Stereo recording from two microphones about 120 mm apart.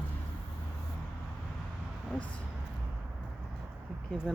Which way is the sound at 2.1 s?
10° left (ahead or behind).